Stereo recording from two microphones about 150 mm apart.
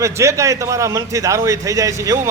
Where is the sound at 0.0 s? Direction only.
20° right (ahead or behind).